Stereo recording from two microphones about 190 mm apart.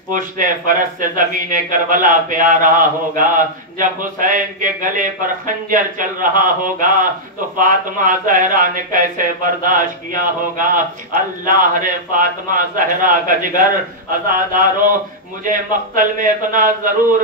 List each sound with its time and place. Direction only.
0.1 s a man's voice: 45° right (ahead or behind)